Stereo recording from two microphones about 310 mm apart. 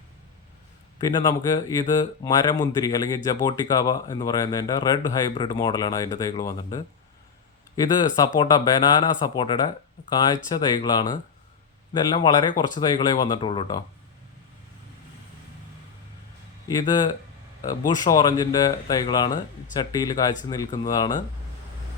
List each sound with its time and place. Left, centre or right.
0.9 s speech: centre
7.9 s speech: centre
16.6 s speech: centre